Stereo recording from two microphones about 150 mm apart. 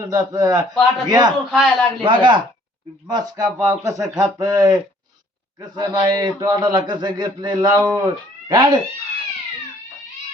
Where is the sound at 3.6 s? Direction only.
20° right (ahead or behind).